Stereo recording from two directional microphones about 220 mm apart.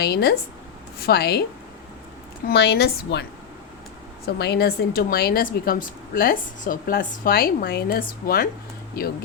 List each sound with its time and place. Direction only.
0.0 s a woman's voice: 45° left (ahead or behind)
2.5 s a woman's voice: 50° left (ahead or behind)
4.4 s speech: 50° left (ahead or behind)